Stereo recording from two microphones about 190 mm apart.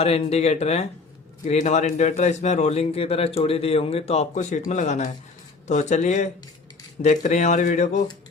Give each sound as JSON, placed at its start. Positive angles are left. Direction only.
{"t": 0.0, "sound": "a man's voice", "side_deg": 30}